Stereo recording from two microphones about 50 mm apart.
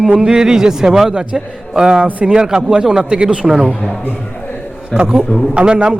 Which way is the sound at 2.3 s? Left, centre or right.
Centre.